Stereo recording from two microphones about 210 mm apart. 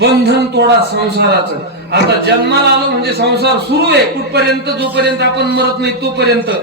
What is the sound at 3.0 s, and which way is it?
A man's voice, 50° right (ahead or behind).